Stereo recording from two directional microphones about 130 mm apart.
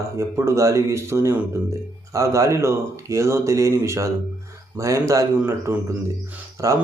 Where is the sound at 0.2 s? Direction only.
20° right (ahead or behind).